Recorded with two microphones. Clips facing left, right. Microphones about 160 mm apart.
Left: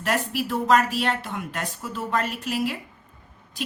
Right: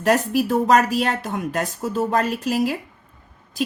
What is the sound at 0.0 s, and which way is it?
A woman's voice, 40° right (ahead or behind).